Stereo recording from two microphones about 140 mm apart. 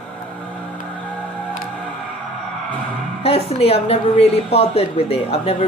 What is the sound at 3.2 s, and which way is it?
A woman's voice, 45° left (ahead or behind).